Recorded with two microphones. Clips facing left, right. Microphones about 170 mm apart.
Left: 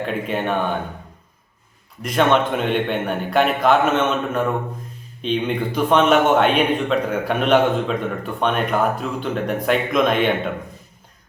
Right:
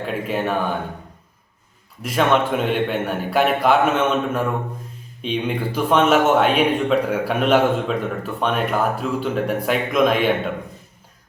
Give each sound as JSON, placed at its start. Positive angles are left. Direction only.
{"t": 0.0, "sound": "speech", "side_deg": -5}
{"t": 2.0, "sound": "a man's voice", "side_deg": -5}